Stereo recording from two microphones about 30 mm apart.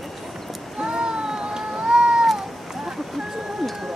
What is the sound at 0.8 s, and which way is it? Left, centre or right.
Cat, right.